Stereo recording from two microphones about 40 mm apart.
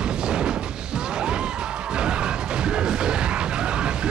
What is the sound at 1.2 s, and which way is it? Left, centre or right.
Smash, right.